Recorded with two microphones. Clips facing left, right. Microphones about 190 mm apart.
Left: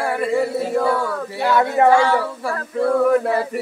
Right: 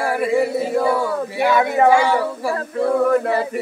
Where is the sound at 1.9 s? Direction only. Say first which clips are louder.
Even; 15° right (ahead or behind).